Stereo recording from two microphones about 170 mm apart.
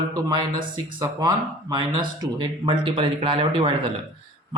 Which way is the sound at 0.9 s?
25° right (ahead or behind).